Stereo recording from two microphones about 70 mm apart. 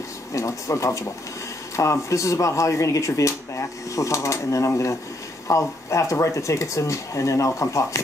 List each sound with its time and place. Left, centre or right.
0.3 s speech: left